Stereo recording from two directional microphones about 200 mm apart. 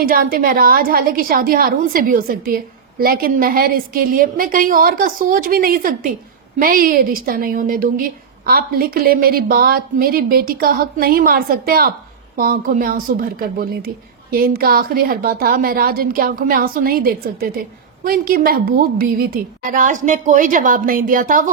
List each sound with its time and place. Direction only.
0.0 s a woman's voice: 45° right (ahead or behind)